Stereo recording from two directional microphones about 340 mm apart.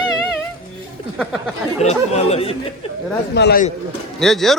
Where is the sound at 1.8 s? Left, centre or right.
Centre.